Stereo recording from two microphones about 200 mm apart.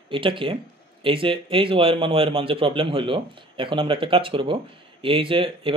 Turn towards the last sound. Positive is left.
turn(degrees=-25)  # may be behind; listen again after turning